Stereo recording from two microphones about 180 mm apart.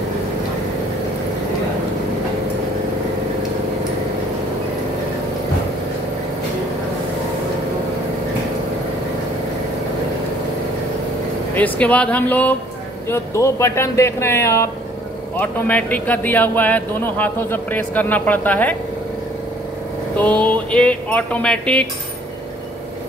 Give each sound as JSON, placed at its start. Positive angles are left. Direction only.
{"t": 11.5, "sound": "speech", "side_deg": 10}
{"t": 20.2, "sound": "speech", "side_deg": 10}